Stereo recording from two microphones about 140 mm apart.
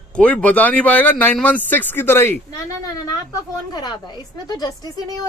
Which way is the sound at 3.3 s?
30° left (ahead or behind).